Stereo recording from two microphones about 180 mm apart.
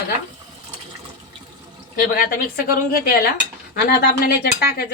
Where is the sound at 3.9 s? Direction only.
60° left (ahead or behind).